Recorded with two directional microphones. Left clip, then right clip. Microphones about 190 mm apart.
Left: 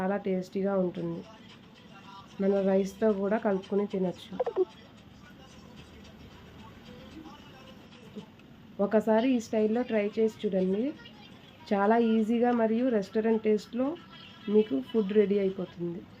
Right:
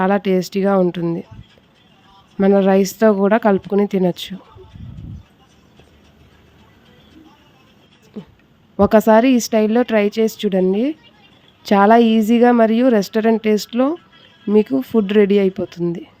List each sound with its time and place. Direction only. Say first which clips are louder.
0.0 s a woman's voice: right 14 dB; 60° right (ahead or behind)
2.4 s a woman's voice: right 13 dB; 60° right (ahead or behind)
8.8 s a woman's voice: right 14 dB; 60° right (ahead or behind)